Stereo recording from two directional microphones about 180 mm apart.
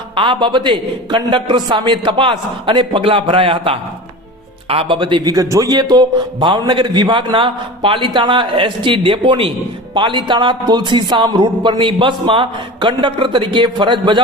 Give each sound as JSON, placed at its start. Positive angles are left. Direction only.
{"t": 0.2, "sound": "a man's voice", "side_deg": -25}